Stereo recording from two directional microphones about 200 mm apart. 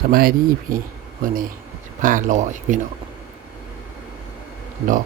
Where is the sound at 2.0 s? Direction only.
40° right (ahead or behind).